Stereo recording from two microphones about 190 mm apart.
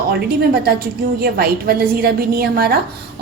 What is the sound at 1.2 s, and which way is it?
A woman's voice, 55° right (ahead or behind).